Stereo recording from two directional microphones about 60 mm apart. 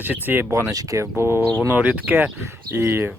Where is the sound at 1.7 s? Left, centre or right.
Right.